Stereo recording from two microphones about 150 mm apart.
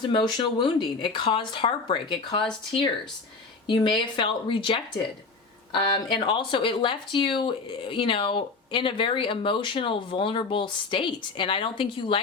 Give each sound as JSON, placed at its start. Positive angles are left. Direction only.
{"t": 0.1, "sound": "speech", "side_deg": 30}
{"t": 3.7, "sound": "speech", "side_deg": 30}